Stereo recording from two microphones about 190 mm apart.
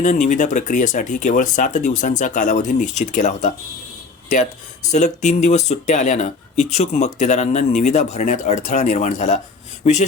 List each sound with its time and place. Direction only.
0.0 s speech: 40° left (ahead or behind)
4.9 s speech: 40° left (ahead or behind)